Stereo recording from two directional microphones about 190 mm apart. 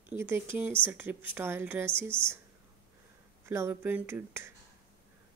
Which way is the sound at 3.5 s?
15° right (ahead or behind).